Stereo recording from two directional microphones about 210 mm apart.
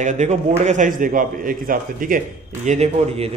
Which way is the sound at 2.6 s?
30° right (ahead or behind).